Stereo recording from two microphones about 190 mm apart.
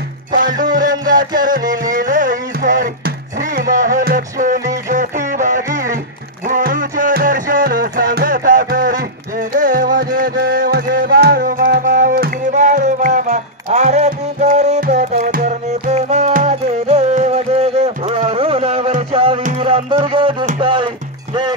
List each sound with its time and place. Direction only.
0.3 s music: 45° right (ahead or behind); by 20.9 s 25° right (ahead or behind)